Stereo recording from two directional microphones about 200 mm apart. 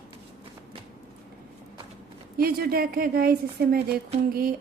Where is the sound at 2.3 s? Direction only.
50° right (ahead or behind).